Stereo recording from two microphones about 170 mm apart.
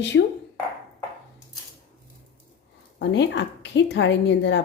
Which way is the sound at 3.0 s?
90° left.